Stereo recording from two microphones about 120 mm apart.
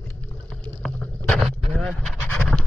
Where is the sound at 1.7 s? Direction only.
5° left (ahead or behind).